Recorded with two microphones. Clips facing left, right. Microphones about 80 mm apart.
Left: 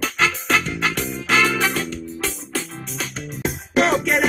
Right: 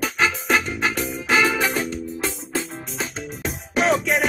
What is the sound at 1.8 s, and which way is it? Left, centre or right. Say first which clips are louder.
Music: right 1 dB; right.